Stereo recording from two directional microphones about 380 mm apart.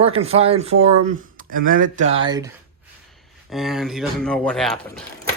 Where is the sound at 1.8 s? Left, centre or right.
Centre.